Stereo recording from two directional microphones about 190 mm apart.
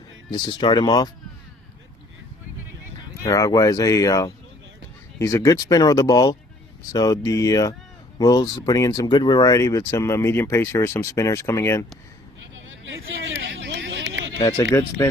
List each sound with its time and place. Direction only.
0.3 s speech: 25° left (ahead or behind)
3.2 s speech: 15° left (ahead or behind)
12.5 s a sound: 80° right
14.6 s speech: 15° left (ahead or behind)